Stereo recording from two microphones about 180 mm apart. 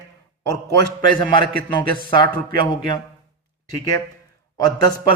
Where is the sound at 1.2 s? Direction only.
25° left (ahead or behind).